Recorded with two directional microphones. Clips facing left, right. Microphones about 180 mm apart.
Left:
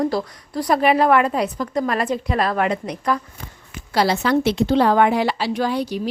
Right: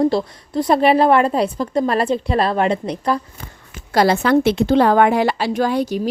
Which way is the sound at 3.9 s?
50° right (ahead or behind).